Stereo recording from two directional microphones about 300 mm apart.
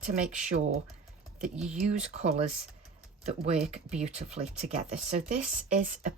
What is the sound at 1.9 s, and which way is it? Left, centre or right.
Speech, right.